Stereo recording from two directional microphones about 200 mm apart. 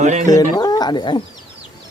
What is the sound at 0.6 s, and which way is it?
Speech, 20° left (ahead or behind).